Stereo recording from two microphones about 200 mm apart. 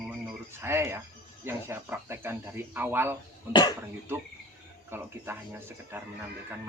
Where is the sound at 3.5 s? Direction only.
20° left (ahead or behind).